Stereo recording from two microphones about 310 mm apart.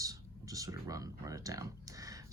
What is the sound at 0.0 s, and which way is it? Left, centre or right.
Speech, centre.